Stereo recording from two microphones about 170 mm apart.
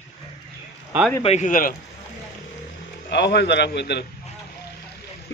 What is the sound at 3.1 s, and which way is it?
Speech, 80° left.